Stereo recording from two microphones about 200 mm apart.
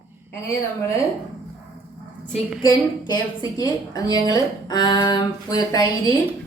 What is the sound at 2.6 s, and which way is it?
A woman's voice, 20° left (ahead or behind).